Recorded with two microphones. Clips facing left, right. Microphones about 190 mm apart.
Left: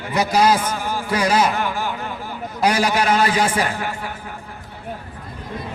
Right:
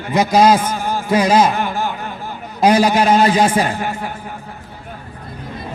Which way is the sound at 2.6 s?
20° right (ahead or behind).